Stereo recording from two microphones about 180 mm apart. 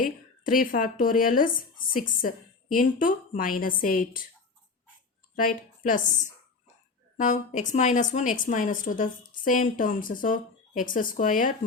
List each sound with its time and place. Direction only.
0.0 s a woman's voice: 50° left (ahead or behind)
5.4 s a woman's voice: 50° left (ahead or behind)